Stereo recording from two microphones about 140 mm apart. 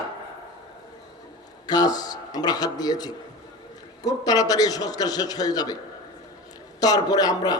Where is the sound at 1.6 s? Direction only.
30° left (ahead or behind).